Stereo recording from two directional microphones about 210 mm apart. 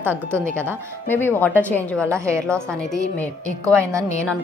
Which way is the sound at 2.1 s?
15° right (ahead or behind).